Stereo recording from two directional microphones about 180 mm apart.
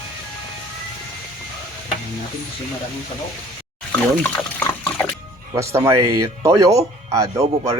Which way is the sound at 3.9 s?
10° left (ahead or behind).